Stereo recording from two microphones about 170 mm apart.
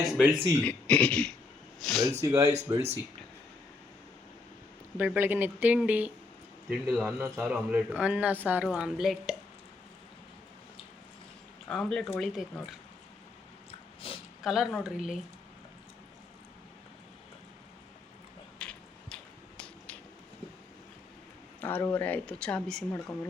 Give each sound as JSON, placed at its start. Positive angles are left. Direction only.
{"t": 0.0, "sound": "a woman's voice", "side_deg": 0}
{"t": 2.2, "sound": "a woman's voice", "side_deg": -20}
{"t": 2.5, "sound": "speech", "side_deg": -40}
{"t": 4.9, "sound": "a woman's voice", "side_deg": -10}
{"t": 11.7, "sound": "a woman's voice", "side_deg": 5}
{"t": 13.7, "sound": "biting", "side_deg": 35}
{"t": 14.4, "sound": "a woman's voice", "side_deg": 0}
{"t": 18.6, "sound": "a sound", "side_deg": 5}
{"t": 21.6, "sound": "speech", "side_deg": 10}